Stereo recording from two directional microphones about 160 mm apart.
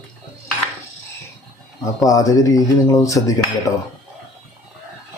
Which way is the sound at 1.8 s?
20° left (ahead or behind).